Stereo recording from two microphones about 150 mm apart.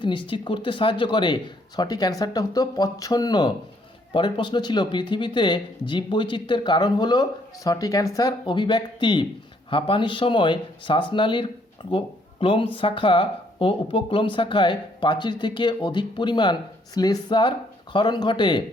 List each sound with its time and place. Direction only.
0.0 s speech: 35° left (ahead or behind)